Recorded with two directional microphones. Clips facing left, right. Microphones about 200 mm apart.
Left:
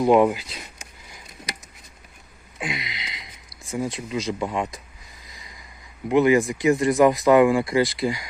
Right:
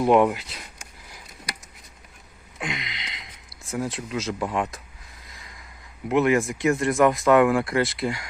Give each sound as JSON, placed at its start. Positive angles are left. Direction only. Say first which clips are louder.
{"t": 0.0, "sound": "speech", "louder": "left 1 dB", "side_deg": 0}
{"t": 2.6, "sound": "a sound", "louder": "left 1 dB", "side_deg": 5}
{"t": 3.6, "sound": "speech", "louder": "left 1 dB", "side_deg": 0}
{"t": 6.1, "sound": "speech", "louder": "left 3 dB", "side_deg": 0}